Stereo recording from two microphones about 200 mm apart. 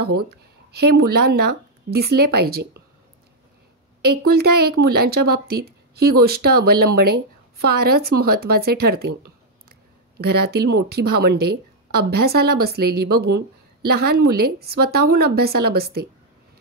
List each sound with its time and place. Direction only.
0.0 s speech: 55° right (ahead or behind)
4.1 s speech: 55° right (ahead or behind)